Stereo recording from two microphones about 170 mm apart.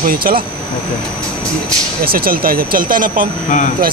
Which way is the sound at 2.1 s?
60° right (ahead or behind).